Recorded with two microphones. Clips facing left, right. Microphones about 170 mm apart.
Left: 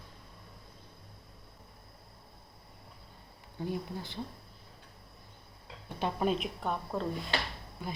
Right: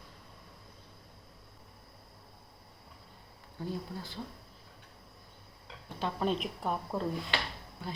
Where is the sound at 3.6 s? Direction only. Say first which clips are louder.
Left 2 dB; 15° left (ahead or behind).